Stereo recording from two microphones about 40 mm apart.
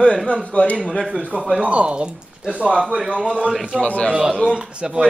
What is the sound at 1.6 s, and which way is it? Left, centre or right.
A man's voice, right.